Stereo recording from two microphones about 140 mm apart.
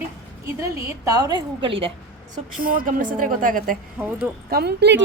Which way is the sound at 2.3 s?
80° right.